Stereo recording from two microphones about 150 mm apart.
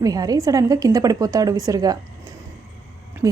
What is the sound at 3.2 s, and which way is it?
Speech, 20° right (ahead or behind).